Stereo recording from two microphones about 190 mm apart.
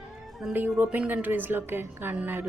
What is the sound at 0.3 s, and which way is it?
Speech, 5° right (ahead or behind).